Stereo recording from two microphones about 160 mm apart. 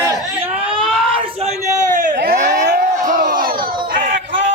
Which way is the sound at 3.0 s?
55° right (ahead or behind).